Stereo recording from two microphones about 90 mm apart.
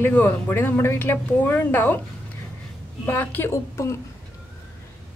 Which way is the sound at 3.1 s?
25° left (ahead or behind).